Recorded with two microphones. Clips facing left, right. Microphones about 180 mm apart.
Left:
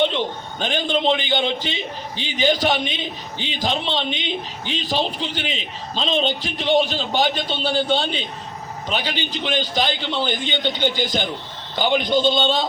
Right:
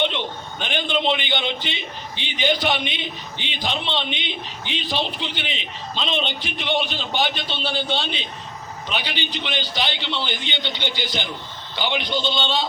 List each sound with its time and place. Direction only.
0.6 s a man's voice: 40° left (ahead or behind)